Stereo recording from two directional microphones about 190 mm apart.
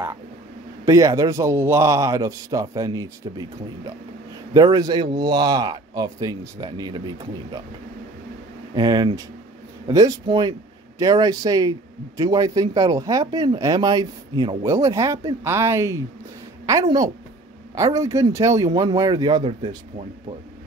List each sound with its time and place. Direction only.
0.8 s a man's voice: 15° right (ahead or behind)
8.7 s a man's voice: 20° right (ahead or behind)